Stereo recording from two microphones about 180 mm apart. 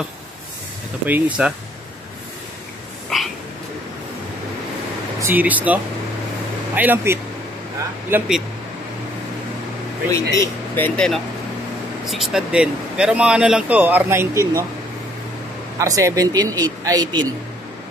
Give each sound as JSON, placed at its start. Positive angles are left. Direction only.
{"t": 1.0, "sound": "speech", "side_deg": -10}
{"t": 3.1, "sound": "a sound", "side_deg": 0}
{"t": 5.2, "sound": "speech", "side_deg": -10}
{"t": 10.1, "sound": "speech", "side_deg": 15}
{"t": 12.1, "sound": "speech", "side_deg": 0}
{"t": 15.8, "sound": "a man's voice", "side_deg": -15}